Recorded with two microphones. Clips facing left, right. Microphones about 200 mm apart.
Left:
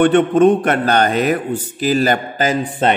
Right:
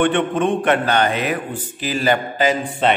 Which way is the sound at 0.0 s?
40° left (ahead or behind).